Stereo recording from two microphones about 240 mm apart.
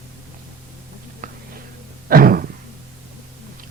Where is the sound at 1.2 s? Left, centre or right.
Right.